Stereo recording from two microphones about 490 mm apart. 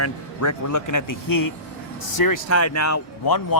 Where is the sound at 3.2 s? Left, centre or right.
Left.